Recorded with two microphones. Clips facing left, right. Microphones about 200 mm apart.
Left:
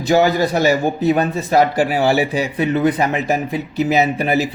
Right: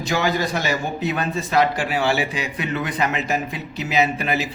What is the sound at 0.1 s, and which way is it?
Speech, 35° left (ahead or behind).